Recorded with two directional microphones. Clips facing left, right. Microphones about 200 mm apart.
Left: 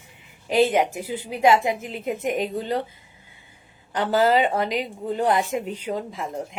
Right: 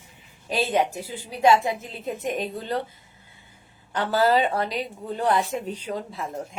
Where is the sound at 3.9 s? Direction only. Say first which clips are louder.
Left 2 dB; 20° left (ahead or behind).